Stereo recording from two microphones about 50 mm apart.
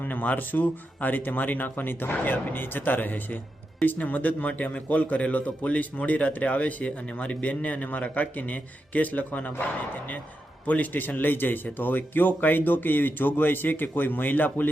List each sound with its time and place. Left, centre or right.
0.0 s a man's voice: left
10.7 s a man's voice: left